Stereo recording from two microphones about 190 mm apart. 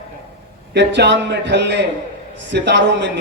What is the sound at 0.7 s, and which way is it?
A man's voice, 65° right (ahead or behind).